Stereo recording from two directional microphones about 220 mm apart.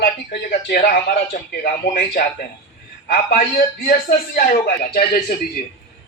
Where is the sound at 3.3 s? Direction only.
40° left (ahead or behind).